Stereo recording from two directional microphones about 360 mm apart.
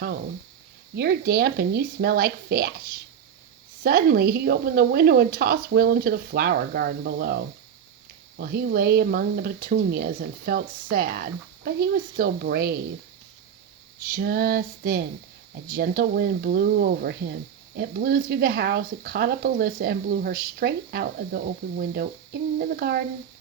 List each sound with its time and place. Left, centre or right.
0.9 s speech: right
14.1 s speech: right